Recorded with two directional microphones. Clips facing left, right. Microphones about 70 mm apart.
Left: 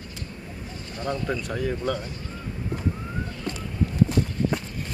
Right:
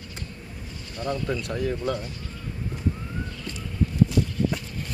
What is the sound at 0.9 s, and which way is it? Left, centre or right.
Speech, left.